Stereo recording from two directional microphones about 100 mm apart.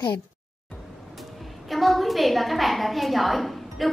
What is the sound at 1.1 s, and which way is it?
A woman's voice, centre (ahead or behind).